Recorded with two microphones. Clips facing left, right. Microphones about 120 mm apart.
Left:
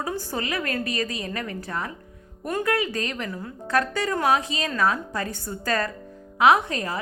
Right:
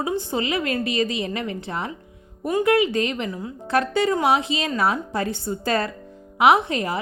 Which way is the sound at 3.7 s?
30° right (ahead or behind).